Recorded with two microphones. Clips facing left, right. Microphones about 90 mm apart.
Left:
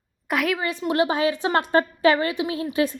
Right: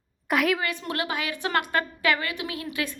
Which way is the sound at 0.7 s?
25° left (ahead or behind).